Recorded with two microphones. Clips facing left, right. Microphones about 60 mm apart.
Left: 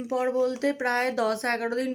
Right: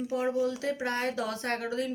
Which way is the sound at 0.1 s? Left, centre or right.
Left.